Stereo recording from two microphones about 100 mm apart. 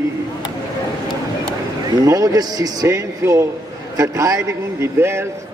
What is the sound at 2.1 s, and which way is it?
A man's voice, 35° right (ahead or behind).